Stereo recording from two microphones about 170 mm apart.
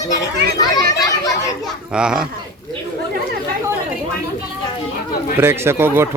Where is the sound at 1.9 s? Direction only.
5° right (ahead or behind).